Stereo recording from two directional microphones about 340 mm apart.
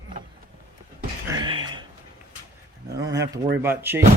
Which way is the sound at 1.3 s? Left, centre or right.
Centre.